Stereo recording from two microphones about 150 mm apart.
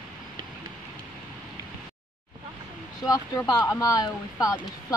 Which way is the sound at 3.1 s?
20° left (ahead or behind).